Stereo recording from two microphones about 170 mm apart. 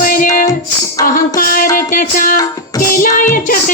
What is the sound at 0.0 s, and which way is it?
Music, 55° left (ahead or behind).